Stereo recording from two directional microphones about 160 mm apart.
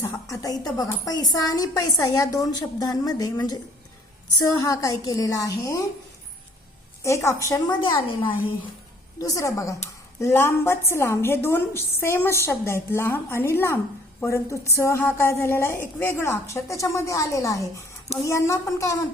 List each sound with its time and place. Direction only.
0.0 s a woman's voice: 20° left (ahead or behind)
7.0 s a woman's voice: 20° left (ahead or behind)
9.2 s a woman's voice: 20° left (ahead or behind)